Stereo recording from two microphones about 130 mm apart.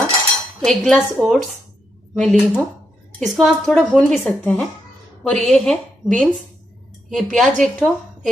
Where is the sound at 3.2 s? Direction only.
Centre (ahead or behind).